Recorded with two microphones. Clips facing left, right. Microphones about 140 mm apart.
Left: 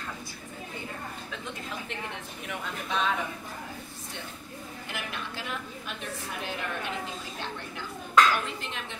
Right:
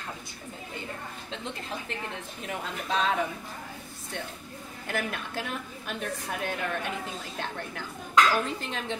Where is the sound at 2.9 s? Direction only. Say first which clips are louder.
Right 2 dB; 35° right (ahead or behind).